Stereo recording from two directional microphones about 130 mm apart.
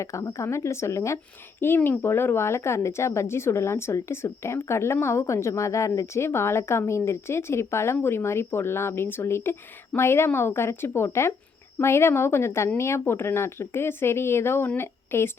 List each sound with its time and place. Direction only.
0.0 s speech: 25° left (ahead or behind)